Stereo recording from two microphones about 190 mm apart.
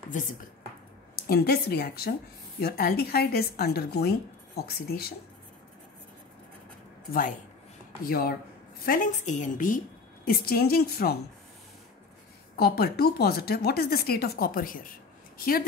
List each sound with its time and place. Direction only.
0.1 s a woman's voice: 40° left (ahead or behind)
1.1 s a woman's voice: 55° left (ahead or behind)
8.0 s speech: 50° left (ahead or behind)
10.2 s speech: 55° left (ahead or behind)
12.5 s speech: 55° left (ahead or behind)